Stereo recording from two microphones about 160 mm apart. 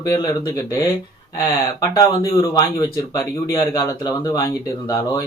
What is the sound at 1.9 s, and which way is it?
Speech, 25° left (ahead or behind).